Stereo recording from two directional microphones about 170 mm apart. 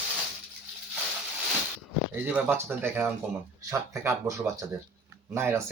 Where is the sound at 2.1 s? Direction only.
10° right (ahead or behind).